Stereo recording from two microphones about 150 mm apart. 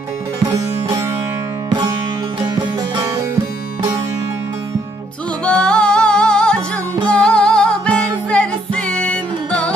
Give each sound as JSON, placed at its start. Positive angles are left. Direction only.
{"t": 0.4, "sound": "music", "side_deg": -25}
{"t": 5.5, "sound": "music", "side_deg": 5}